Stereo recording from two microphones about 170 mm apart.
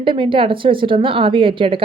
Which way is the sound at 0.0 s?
30° right (ahead or behind).